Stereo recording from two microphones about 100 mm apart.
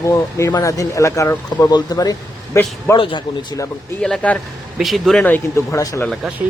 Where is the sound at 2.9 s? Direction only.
55° left (ahead or behind).